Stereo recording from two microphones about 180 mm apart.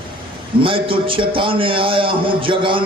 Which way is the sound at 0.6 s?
30° right (ahead or behind).